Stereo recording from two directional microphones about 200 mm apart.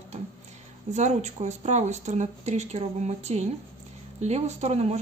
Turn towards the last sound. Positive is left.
turn(degrees=-30)  # may be behind; listen again after turning